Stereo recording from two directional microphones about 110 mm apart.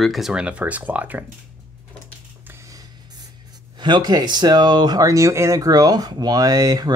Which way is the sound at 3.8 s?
40° right (ahead or behind).